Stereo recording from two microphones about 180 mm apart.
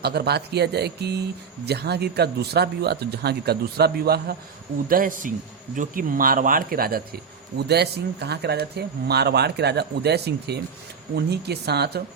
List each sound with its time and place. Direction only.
0.0 s speech: 60° right (ahead or behind)
7.7 s speech: 65° right (ahead or behind)